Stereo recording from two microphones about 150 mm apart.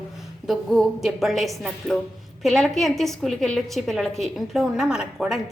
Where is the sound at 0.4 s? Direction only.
Centre (ahead or behind).